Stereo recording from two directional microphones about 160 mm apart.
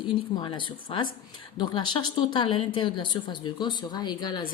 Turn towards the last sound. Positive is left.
turn(degrees=25)  # may be behind; listen again after turning